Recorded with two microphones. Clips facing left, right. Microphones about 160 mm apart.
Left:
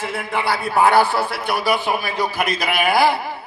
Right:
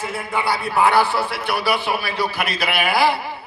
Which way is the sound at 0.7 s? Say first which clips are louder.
Left 2 dB; 45° left (ahead or behind).